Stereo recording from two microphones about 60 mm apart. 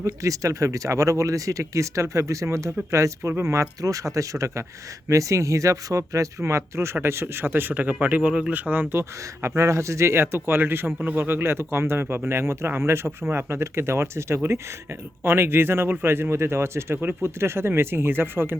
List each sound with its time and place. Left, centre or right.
0.0 s speech: right
6.6 s a man's voice: right
8.3 s speech: centre
8.5 s a man's voice: right
9.4 s a man's voice: right